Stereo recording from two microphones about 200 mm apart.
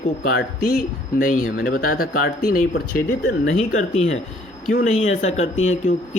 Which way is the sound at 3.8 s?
35° left (ahead or behind).